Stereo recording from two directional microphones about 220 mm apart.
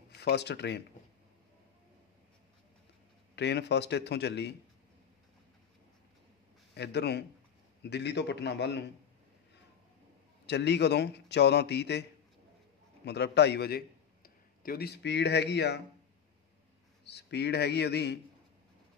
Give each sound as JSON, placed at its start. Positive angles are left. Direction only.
{"t": 0.1, "sound": "speech", "side_deg": 50}
{"t": 3.3, "sound": "a man's voice", "side_deg": 50}
{"t": 6.7, "sound": "a man's voice", "side_deg": 50}
{"t": 10.4, "sound": "a man's voice", "side_deg": 50}
{"t": 13.0, "sound": "a man's voice", "side_deg": 50}
{"t": 17.0, "sound": "a man's voice", "side_deg": 50}